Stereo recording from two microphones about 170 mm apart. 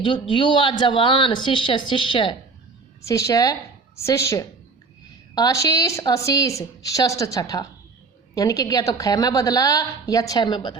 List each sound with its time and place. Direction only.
0.0 s a woman's voice: 30° left (ahead or behind)
3.0 s a woman's voice: 20° left (ahead or behind)